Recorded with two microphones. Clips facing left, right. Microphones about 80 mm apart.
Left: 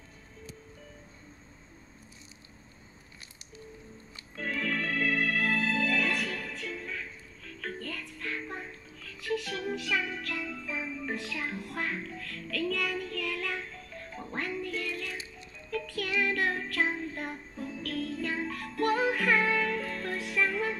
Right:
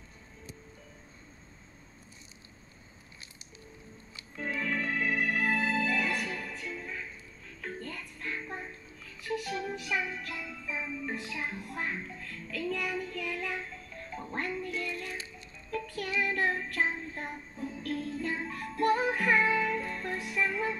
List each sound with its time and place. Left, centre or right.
4.6 s music: centre